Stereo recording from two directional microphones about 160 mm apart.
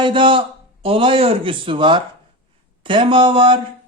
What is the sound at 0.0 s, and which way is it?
A man's voice, 30° right (ahead or behind).